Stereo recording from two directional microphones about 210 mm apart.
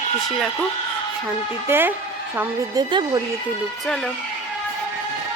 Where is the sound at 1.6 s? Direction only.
10° right (ahead or behind).